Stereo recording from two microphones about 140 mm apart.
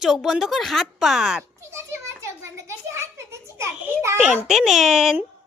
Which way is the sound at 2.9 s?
20° right (ahead or behind).